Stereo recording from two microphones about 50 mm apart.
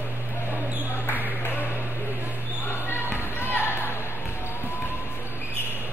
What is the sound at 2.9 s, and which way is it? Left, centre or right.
Basketball bounce, left.